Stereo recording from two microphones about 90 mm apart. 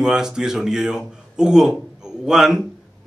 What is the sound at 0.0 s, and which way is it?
A man's voice, 5° right (ahead or behind).